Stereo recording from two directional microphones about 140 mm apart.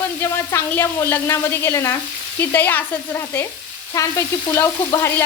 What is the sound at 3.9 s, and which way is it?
Frying, 20° left (ahead or behind).